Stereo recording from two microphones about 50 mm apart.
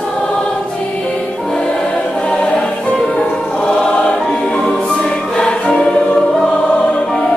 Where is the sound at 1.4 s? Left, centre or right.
Centre.